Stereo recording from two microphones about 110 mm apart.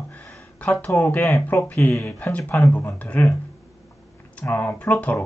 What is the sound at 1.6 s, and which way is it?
Speech, 15° left (ahead or behind).